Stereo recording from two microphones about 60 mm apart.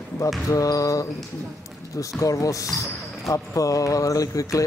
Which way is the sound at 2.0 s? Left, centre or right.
Left.